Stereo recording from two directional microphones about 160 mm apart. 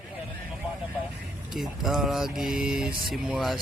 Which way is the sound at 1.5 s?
Centre (ahead or behind).